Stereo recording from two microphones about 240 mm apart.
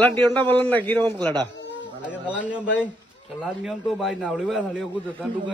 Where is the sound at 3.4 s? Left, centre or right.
Centre.